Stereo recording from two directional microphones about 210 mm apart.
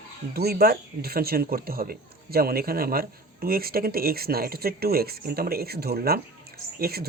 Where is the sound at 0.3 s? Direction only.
50° right (ahead or behind).